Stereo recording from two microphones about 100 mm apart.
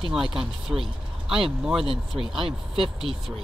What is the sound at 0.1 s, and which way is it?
Speech, 5° right (ahead or behind).